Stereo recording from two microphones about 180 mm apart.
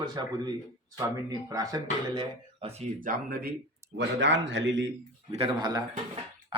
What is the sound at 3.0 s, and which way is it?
Speech, 50° right (ahead or behind).